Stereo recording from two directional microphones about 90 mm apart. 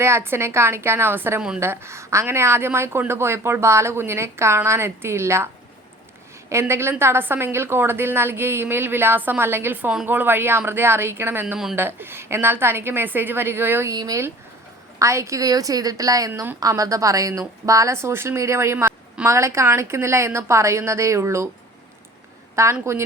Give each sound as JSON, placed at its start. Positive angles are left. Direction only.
{"t": 0.0, "sound": "a woman's voice", "side_deg": -25}
{"t": 6.5, "sound": "a woman's voice", "side_deg": -30}
{"t": 11.5, "sound": "a woman's voice", "side_deg": -10}
{"t": 11.8, "sound": "a woman's voice", "side_deg": -25}
{"t": 13.9, "sound": "speech", "side_deg": -45}
{"t": 14.9, "sound": "a woman's voice", "side_deg": -35}
{"t": 16.3, "sound": "a woman's voice", "side_deg": -30}
{"t": 16.6, "sound": "a woman's voice", "side_deg": -40}
{"t": 22.5, "sound": "a woman's voice", "side_deg": -30}